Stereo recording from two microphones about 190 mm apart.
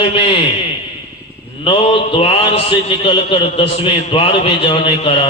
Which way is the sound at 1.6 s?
30° left (ahead or behind).